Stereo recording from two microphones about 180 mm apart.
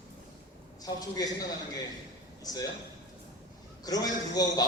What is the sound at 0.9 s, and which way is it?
A man's voice, 20° left (ahead or behind).